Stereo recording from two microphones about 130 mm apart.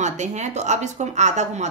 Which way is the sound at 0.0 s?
65° right (ahead or behind).